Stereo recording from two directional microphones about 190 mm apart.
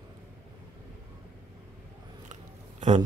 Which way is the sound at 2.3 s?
40° right (ahead or behind).